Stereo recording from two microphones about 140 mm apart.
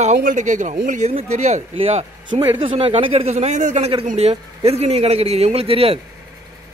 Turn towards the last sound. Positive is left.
turn(degrees=-45)  # may be behind; listen again after turning